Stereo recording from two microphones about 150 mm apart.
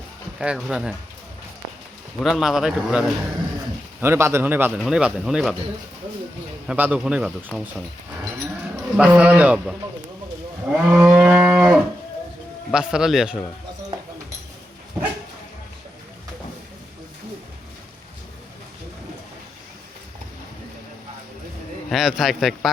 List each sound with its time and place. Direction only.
0.3 s speech: 5° right (ahead or behind)
2.2 s speech: centre (ahead or behind)
4.0 s speech: 15° right (ahead or behind)
6.7 s speech: 10° right (ahead or behind)
10.7 s moo: 10° right (ahead or behind)
12.7 s speech: 5° right (ahead or behind)
21.8 s speech: centre (ahead or behind)